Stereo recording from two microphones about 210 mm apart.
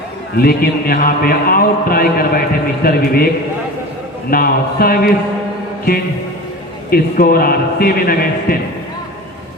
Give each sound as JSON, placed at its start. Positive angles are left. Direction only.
{"t": 0.3, "sound": "a man's voice", "side_deg": 45}
{"t": 4.3, "sound": "a man's voice", "side_deg": 45}
{"t": 6.9, "sound": "a man's voice", "side_deg": 45}